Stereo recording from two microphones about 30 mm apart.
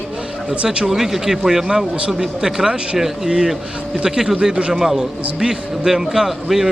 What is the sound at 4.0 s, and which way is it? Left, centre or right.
Speech, right.